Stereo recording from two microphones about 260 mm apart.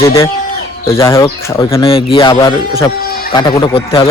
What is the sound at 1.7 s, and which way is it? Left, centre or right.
Speech, left.